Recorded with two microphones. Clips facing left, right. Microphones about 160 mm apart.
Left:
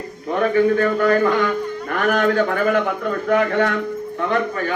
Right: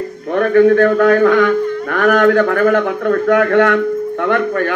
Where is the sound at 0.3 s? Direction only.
65° right (ahead or behind).